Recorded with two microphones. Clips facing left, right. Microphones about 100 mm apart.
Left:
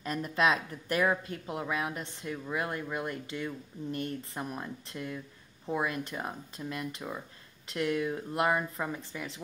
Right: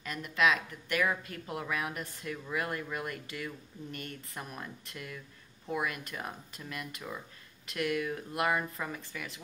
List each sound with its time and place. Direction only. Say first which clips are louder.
0.0 s speech: left 1 dB; 35° left (ahead or behind)